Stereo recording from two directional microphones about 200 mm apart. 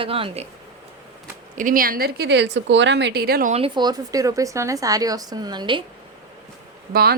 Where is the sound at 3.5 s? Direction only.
25° right (ahead or behind).